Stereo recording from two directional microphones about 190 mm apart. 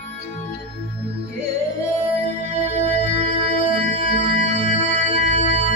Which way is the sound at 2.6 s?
35° right (ahead or behind).